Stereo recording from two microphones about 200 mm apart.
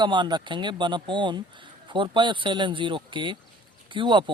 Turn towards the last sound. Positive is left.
turn(degrees=-25)  # may be behind; listen again after turning